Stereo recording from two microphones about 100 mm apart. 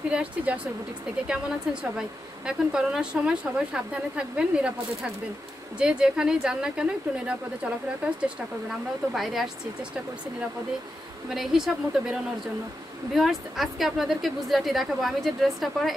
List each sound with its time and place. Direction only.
0.1 s a woman's voice: 10° right (ahead or behind)
11.2 s speech: 5° right (ahead or behind)